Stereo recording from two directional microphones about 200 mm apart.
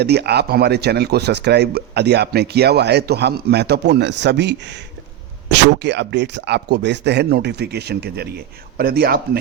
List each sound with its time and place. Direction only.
0.0 s speech: 55° right (ahead or behind)